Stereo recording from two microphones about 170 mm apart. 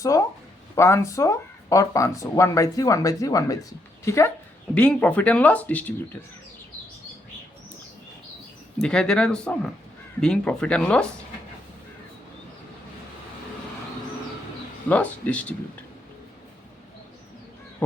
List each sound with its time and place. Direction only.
0.0 s a sound: 20° left (ahead or behind)
0.8 s speech: 15° left (ahead or behind)
8.8 s speech: 5° left (ahead or behind)
14.8 s speech: 10° left (ahead or behind)